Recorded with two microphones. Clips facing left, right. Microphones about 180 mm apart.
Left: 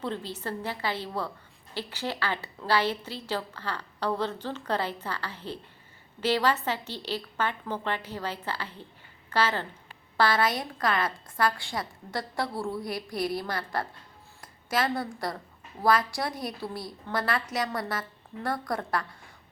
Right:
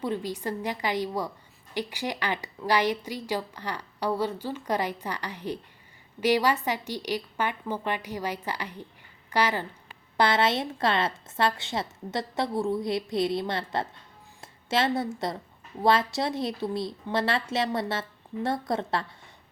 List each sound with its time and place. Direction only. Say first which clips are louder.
0.0 s a woman's voice: right 3 dB; 15° right (ahead or behind)